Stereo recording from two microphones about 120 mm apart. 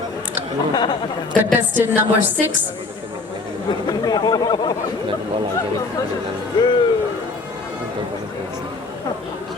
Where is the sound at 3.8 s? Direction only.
35° left (ahead or behind).